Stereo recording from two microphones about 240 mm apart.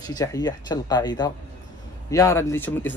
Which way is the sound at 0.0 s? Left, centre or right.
Centre.